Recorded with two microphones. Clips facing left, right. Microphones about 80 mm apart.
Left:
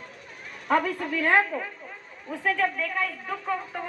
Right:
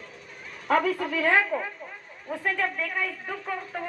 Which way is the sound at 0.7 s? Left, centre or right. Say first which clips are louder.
Right 1 dB; right.